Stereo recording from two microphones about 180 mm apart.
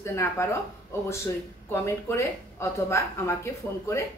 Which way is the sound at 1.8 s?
15° left (ahead or behind).